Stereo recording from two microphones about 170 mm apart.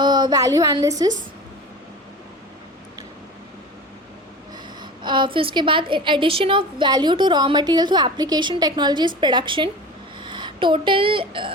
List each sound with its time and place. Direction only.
0.0 s a woman's voice: 25° right (ahead or behind)
4.8 s a woman's voice: 30° right (ahead or behind)